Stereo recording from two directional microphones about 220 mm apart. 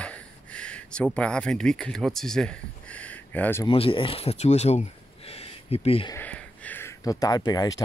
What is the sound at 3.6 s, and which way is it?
Speech, 25° left (ahead or behind).